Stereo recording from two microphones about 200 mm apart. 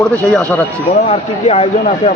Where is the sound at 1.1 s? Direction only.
30° left (ahead or behind).